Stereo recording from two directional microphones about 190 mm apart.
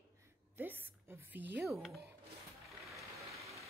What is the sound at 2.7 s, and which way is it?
Vehicle, centre (ahead or behind).